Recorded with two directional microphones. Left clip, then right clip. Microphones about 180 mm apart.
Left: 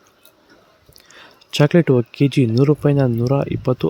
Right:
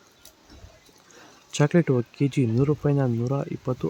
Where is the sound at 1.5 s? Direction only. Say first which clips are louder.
Left 7 dB; 25° left (ahead or behind).